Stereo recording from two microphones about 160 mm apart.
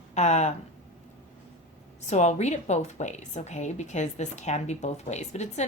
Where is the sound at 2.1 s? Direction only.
45° left (ahead or behind).